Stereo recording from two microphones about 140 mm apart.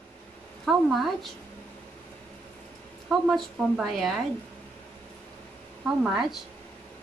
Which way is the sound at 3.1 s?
Centre (ahead or behind).